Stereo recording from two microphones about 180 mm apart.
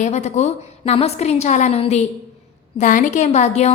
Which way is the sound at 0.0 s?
40° left (ahead or behind).